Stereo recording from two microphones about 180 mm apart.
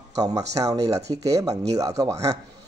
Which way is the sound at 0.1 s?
20° right (ahead or behind).